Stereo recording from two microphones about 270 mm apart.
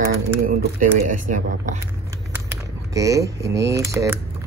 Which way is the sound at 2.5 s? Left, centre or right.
Centre.